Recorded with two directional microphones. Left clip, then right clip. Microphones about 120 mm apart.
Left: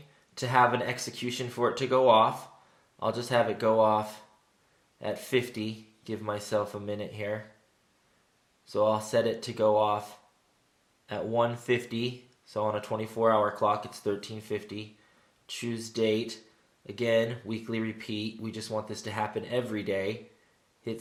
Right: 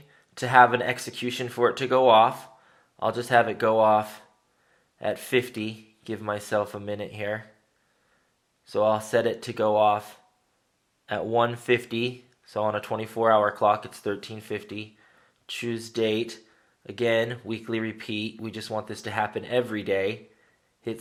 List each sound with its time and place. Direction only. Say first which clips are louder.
0.3 s speech: right 6 dB; 30° right (ahead or behind)
8.6 s speech: right 3 dB; 30° right (ahead or behind)